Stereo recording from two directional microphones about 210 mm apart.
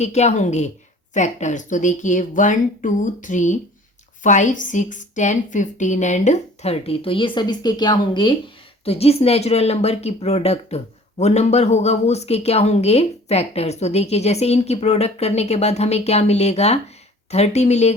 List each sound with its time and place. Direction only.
0.0 s speech: 30° left (ahead or behind)